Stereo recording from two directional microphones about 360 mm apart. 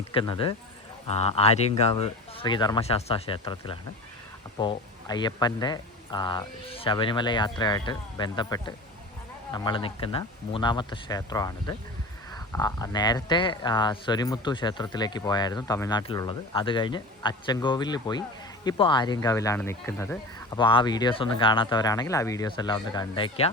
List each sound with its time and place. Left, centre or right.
0.1 s speech: centre